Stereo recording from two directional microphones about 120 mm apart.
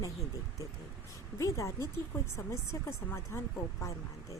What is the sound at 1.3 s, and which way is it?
Speech, 25° left (ahead or behind).